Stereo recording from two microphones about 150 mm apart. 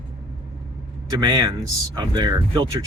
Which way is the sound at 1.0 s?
30° right (ahead or behind).